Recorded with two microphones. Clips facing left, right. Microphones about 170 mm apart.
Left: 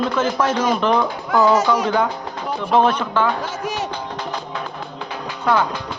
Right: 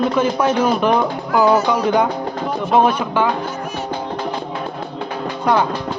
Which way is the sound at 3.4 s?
90° left.